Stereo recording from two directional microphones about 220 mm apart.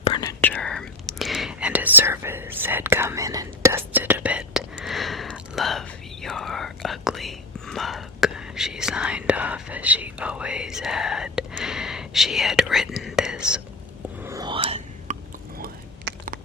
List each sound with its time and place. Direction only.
0.0 s whispering: 25° left (ahead or behind)
0.4 s whispering: 5° left (ahead or behind)
14.3 s whispering: 15° right (ahead or behind)
15.5 s biting: 40° right (ahead or behind)